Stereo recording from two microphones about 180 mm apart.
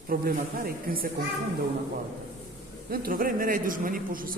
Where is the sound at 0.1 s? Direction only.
55° right (ahead or behind).